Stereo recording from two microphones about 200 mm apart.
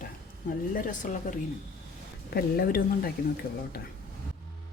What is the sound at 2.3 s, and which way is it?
Speech, 45° left (ahead or behind).